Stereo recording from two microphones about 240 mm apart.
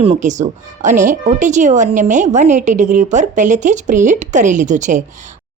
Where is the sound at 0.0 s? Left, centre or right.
Right.